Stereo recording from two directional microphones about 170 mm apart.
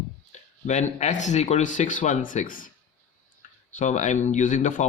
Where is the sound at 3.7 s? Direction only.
45° left (ahead or behind).